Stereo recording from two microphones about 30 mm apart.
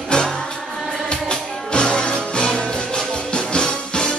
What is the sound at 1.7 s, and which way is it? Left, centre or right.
Music, left.